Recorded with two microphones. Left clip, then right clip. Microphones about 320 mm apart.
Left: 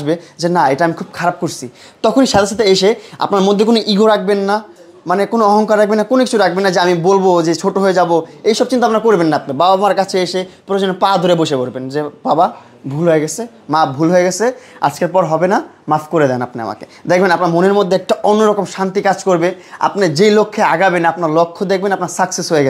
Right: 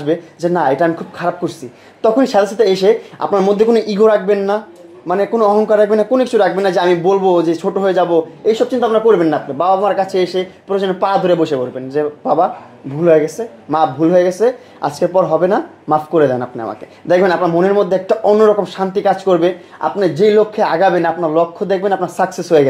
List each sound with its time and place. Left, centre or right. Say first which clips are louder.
0.0 s a woman's voice: even; left